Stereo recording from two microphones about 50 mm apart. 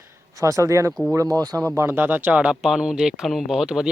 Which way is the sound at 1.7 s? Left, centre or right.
Right.